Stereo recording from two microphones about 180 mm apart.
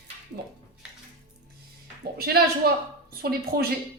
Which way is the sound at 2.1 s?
60° right (ahead or behind).